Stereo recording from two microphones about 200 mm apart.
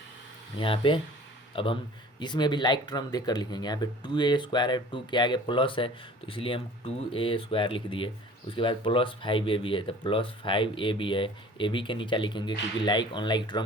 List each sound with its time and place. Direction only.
0.6 s speech: 25° left (ahead or behind)